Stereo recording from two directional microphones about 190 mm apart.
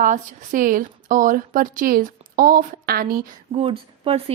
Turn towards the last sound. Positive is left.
turn(degrees=-30)  # may be behind; listen again after turning